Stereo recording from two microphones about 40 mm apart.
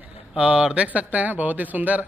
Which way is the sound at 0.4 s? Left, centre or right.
Right.